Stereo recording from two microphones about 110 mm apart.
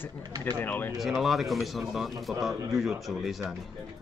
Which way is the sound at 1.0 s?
Centre (ahead or behind).